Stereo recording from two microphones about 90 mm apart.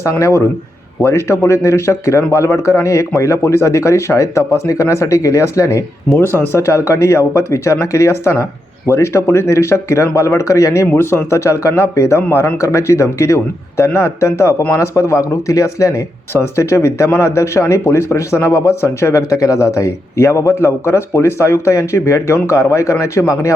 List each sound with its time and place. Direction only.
0.0 s a man's voice: 35° left (ahead or behind)